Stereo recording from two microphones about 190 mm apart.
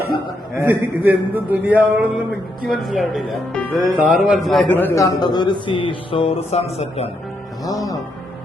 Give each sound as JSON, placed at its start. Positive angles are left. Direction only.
{"t": 0.5, "sound": "a man's voice", "side_deg": -10}
{"t": 7.6, "sound": "a man's voice", "side_deg": 20}